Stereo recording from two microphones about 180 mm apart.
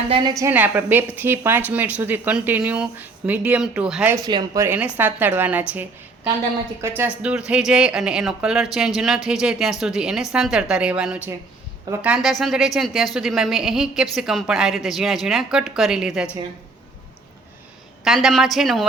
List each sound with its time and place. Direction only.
0.1 s a woman's voice: 25° right (ahead or behind); by 4.1 s 5° right (ahead or behind)
4.1 s speech: 20° right (ahead or behind)
6.8 s speech: 10° right (ahead or behind)
18.0 s speech: centre (ahead or behind)